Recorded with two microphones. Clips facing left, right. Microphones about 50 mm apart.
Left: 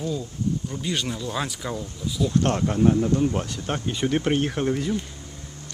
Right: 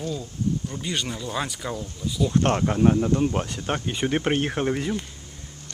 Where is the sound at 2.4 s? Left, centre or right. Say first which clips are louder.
Right 1 dB; right.